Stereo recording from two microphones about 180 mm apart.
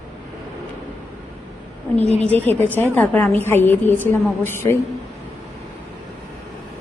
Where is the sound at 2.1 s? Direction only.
10° left (ahead or behind).